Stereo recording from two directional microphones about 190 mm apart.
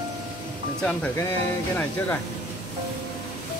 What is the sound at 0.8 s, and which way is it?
Speech, 5° left (ahead or behind).